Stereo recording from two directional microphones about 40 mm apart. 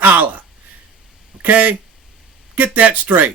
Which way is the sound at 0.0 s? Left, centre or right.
Right.